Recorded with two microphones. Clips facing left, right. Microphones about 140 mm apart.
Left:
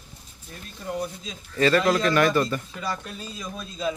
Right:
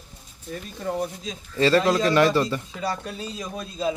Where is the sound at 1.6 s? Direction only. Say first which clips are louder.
Right 1 dB; 30° right (ahead or behind).